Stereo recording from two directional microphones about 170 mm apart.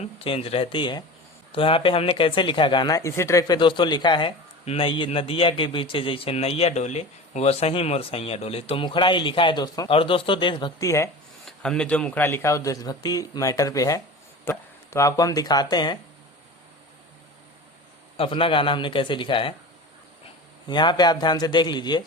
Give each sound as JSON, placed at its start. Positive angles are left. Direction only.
{"t": 0.0, "sound": "speech", "side_deg": 35}
{"t": 11.4, "sound": "a man's voice", "side_deg": 5}
{"t": 18.2, "sound": "speech", "side_deg": 30}
{"t": 20.7, "sound": "a man's voice", "side_deg": 25}